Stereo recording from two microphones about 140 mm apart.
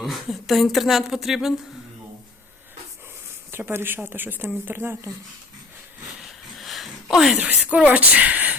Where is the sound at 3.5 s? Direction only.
15° right (ahead or behind).